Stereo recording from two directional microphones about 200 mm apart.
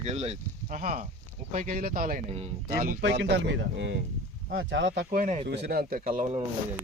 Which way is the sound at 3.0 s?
60° right (ahead or behind).